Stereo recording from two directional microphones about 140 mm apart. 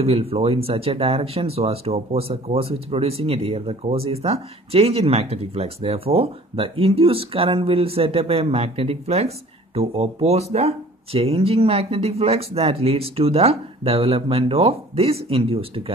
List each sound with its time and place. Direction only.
0.0 s speech: 45° right (ahead or behind)